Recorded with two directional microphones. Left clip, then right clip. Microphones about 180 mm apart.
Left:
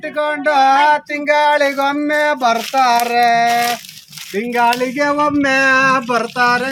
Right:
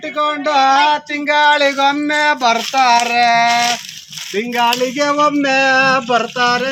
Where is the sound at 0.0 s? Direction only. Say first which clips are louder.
Even; 5° left (ahead or behind).